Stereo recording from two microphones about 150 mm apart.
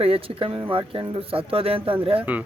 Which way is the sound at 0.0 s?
40° right (ahead or behind).